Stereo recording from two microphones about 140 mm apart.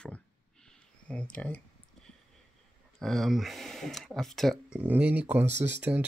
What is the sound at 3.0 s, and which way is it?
Speech, centre (ahead or behind).